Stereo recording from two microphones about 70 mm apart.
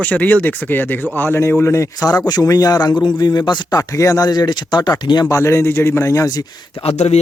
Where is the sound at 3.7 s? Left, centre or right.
Left.